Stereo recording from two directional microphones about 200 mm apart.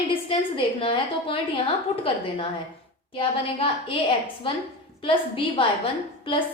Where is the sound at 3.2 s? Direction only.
25° left (ahead or behind).